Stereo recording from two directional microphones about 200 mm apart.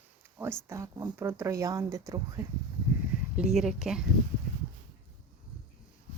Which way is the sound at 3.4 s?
5° right (ahead or behind).